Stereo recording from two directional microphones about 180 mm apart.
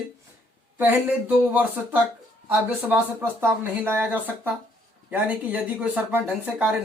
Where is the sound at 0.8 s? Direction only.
10° right (ahead or behind).